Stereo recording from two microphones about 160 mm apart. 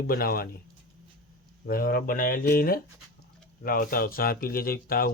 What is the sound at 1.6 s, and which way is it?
Speech, 65° left (ahead or behind).